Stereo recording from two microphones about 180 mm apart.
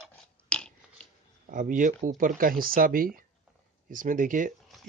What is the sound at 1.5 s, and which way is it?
Speech, 45° right (ahead or behind).